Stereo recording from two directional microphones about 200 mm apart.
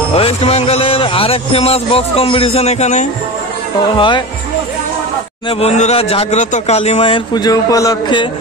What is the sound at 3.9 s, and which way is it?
Speech, 25° left (ahead or behind).